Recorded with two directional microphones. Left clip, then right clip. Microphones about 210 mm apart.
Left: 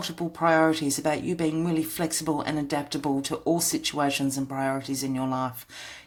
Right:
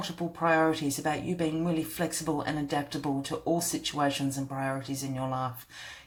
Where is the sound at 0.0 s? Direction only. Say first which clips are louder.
Left 4 dB; 40° left (ahead or behind).